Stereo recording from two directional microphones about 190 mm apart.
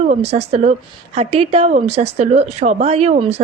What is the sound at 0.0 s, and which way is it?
A woman's voice, 35° right (ahead or behind).